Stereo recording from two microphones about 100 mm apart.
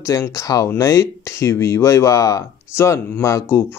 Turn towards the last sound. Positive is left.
turn(degrees=30)  # may be behind; listen again after turning